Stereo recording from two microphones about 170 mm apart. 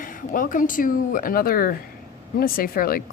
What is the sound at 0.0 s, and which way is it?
Speech, 55° left (ahead or behind).